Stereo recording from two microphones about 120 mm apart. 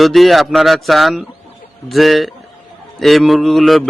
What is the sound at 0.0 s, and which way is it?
A man's voice, centre (ahead or behind).